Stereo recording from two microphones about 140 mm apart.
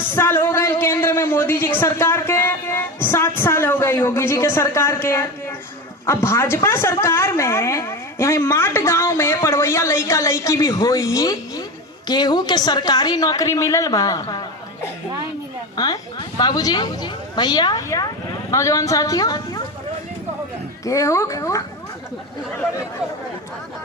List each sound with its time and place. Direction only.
0.1 s a sound: 15° left (ahead or behind)
6.1 s a woman's voice: 20° left (ahead or behind)
15.7 s a woman's voice: 30° left (ahead or behind)
20.8 s a woman's voice: 20° left (ahead or behind)